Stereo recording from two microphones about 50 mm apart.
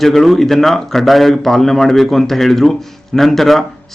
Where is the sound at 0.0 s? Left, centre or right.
Centre.